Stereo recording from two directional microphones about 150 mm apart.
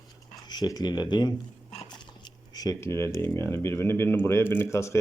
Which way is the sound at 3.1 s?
15° left (ahead or behind).